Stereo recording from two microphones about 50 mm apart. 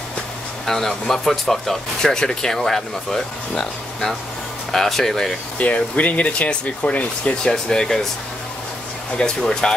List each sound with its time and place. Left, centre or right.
0.7 s speech: centre
5.6 s speech: left
7.5 s speech: centre
9.2 s speech: centre